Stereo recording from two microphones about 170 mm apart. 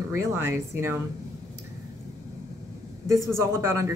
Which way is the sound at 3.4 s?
15° right (ahead or behind).